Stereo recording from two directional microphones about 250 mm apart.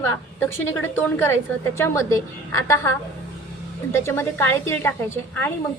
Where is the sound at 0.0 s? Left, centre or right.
Centre.